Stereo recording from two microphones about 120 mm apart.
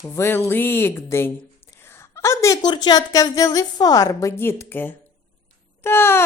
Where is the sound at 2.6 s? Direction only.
35° left (ahead or behind).